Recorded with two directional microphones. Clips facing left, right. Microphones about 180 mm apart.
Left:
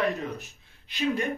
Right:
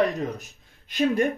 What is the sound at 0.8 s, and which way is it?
Speech, 55° right (ahead or behind).